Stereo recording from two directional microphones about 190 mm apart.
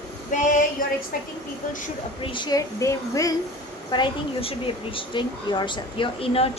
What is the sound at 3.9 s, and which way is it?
Speech, 25° left (ahead or behind).